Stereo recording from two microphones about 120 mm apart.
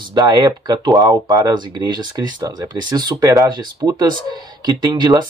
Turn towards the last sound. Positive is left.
turn(degrees=-35)  # may be behind; listen again after turning